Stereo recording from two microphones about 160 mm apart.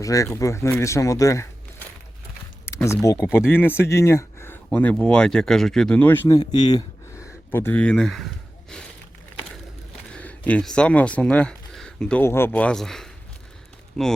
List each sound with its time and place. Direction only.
0.0 s speech: 20° left (ahead or behind)
2.6 s speech: 15° left (ahead or behind)
6.7 s a sound: 20° left (ahead or behind)
7.5 s speech: 15° left (ahead or behind)
10.1 s speech: 10° left (ahead or behind)